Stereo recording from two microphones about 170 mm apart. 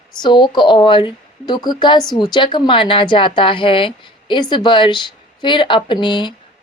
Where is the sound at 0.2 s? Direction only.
25° left (ahead or behind).